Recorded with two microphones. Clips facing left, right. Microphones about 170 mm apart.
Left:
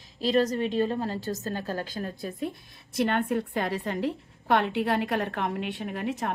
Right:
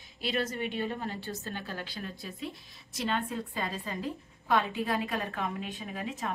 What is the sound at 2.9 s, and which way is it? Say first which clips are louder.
A woman's voice: left 7 dB; 60° left (ahead or behind).